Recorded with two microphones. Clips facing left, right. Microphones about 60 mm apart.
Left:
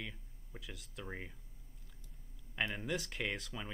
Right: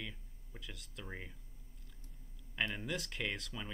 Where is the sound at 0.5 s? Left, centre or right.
Centre.